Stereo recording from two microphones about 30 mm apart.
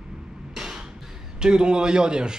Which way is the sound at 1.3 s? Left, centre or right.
Right.